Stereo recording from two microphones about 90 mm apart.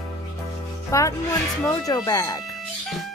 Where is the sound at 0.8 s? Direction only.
35° left (ahead or behind).